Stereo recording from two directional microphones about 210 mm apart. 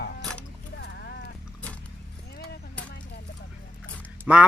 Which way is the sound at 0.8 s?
50° left (ahead or behind).